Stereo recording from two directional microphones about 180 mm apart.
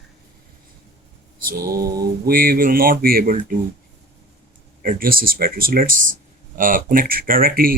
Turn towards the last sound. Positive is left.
turn(degrees=-55)  # may be behind; listen again after turning